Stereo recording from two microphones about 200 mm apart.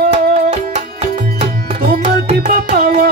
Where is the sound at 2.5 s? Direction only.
45° right (ahead or behind).